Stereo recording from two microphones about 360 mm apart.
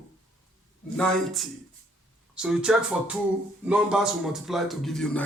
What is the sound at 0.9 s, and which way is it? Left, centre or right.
A man's voice, centre.